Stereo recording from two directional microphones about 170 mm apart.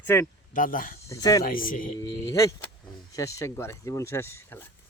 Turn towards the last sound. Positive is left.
turn(degrees=15)  # may be behind; listen again after turning